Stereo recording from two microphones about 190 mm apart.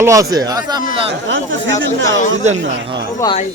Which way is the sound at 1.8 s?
80° right.